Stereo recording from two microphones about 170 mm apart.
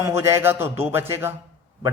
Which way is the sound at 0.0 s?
15° right (ahead or behind).